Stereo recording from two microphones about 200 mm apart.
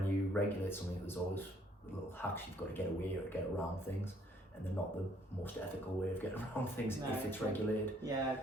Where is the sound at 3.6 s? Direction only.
10° left (ahead or behind).